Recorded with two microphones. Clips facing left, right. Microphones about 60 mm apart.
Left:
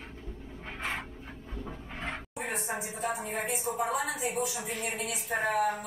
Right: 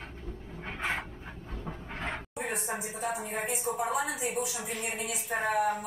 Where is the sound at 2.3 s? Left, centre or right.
Centre.